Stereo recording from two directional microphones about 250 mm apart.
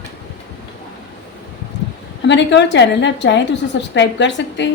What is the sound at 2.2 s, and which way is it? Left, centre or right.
A woman's voice, left.